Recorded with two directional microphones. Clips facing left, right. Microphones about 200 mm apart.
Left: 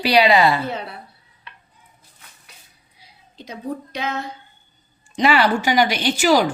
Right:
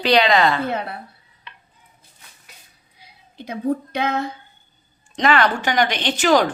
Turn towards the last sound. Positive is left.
turn(degrees=10)  # may be behind; listen again after turning